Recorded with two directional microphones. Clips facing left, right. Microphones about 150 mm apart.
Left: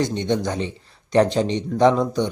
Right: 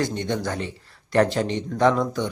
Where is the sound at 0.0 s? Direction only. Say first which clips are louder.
Left 3 dB; 20° left (ahead or behind).